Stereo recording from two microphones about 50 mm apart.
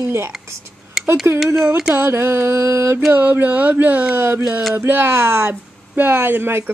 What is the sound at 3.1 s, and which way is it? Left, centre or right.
Music, right.